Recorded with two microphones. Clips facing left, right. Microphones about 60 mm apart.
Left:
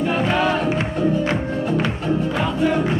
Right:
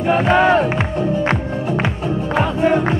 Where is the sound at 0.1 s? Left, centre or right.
Right.